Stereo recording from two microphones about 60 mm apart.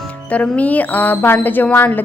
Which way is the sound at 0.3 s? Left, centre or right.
Left.